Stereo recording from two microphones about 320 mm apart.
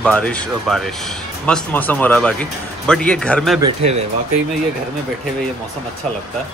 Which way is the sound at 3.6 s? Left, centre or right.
Centre.